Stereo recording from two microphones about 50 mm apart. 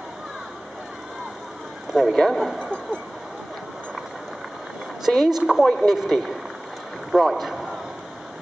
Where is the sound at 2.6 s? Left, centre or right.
Centre.